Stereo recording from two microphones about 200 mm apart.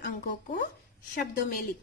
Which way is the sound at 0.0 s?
50° left (ahead or behind).